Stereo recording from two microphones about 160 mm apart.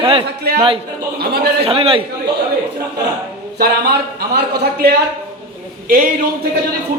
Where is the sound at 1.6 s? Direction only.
35° right (ahead or behind).